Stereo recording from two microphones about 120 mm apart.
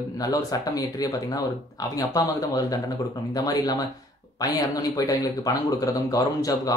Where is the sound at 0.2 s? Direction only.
30° left (ahead or behind).